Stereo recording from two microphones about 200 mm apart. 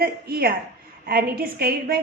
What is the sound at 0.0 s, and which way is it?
A woman's voice, 50° right (ahead or behind).